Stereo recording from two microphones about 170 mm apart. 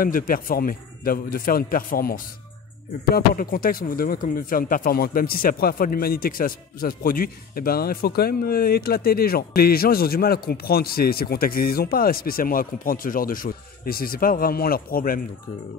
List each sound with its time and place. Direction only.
0.0 s a man's voice: 55° left (ahead or behind)